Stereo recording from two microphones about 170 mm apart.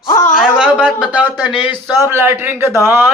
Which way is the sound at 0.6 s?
5° right (ahead or behind).